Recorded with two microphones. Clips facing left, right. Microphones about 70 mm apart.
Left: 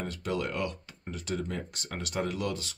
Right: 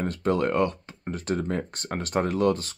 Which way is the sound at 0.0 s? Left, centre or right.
Right.